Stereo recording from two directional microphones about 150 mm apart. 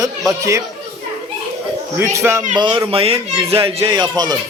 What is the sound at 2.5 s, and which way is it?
Speech, 30° right (ahead or behind).